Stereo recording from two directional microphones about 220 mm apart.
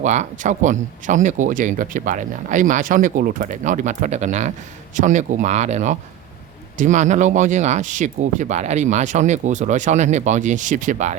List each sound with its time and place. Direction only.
0.0 s speech: 30° right (ahead or behind)